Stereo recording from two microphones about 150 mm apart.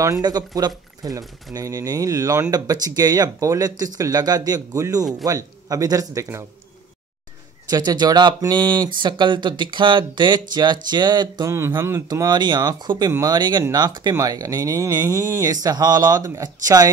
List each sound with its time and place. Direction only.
0.0 s speech: 25° right (ahead or behind)
7.7 s speech: 25° right (ahead or behind)